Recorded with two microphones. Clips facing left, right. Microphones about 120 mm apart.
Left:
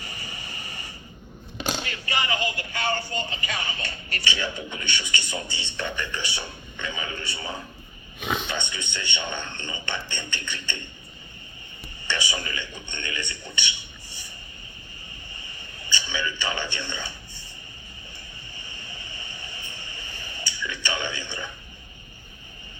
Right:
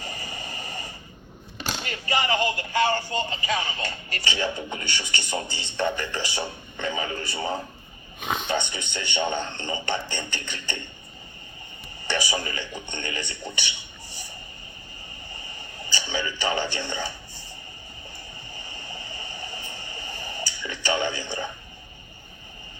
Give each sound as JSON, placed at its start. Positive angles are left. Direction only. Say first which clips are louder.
{"t": 0.0, "sound": "a sound", "louder": "right 4 dB", "side_deg": -35}
{"t": 1.9, "sound": "speech", "louder": "right 3 dB", "side_deg": -35}
{"t": 12.0, "sound": "speech", "louder": "right 3 dB", "side_deg": -35}
{"t": 15.8, "sound": "speech", "louder": "right 1 dB", "side_deg": -35}
{"t": 18.5, "sound": "vehicle", "louder": "right 4 dB", "side_deg": -35}